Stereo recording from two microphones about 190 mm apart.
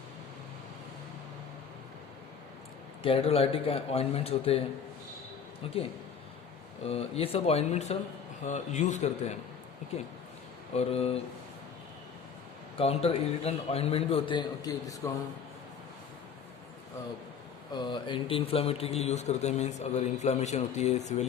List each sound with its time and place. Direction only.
3.0 s a man's voice: 30° left (ahead or behind)
5.6 s a man's voice: 30° left (ahead or behind)
6.8 s a man's voice: 30° left (ahead or behind)
10.8 s a man's voice: 30° left (ahead or behind)
12.7 s a man's voice: 30° left (ahead or behind)
17.7 s a man's voice: 25° left (ahead or behind)